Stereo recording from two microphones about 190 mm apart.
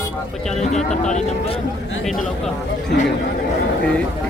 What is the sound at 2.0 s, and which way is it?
Speech, centre (ahead or behind).